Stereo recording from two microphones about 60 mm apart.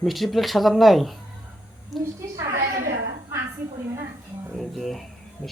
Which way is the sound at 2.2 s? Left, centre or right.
Right.